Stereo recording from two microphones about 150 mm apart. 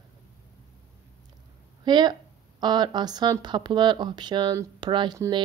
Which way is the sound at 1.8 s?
30° right (ahead or behind).